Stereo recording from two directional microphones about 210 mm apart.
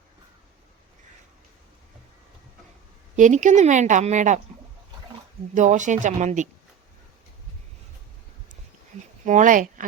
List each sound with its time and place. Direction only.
3.2 s a woman's voice: 35° right (ahead or behind)
5.5 s a woman's voice: 35° right (ahead or behind)
9.2 s speech: 35° right (ahead or behind)